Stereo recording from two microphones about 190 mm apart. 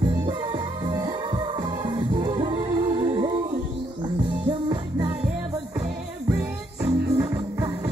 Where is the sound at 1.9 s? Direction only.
25° right (ahead or behind).